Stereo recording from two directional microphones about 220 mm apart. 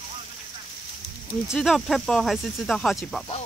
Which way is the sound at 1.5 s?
Centre (ahead or behind).